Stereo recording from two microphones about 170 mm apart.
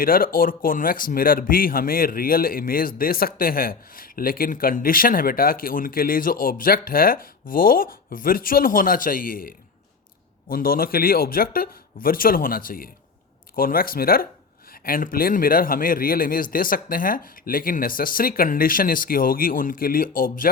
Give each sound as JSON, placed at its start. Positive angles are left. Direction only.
{"t": 0.0, "sound": "speech", "side_deg": 55}